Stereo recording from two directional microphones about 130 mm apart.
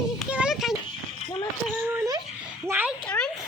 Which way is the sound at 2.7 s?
15° right (ahead or behind).